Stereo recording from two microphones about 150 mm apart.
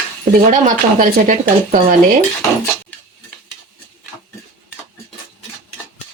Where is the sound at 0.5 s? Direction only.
60° right (ahead or behind).